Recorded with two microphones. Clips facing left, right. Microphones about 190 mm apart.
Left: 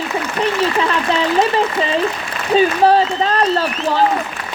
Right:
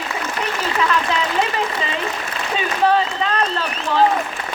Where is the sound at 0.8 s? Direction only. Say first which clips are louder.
Left 3 dB; 30° left (ahead or behind).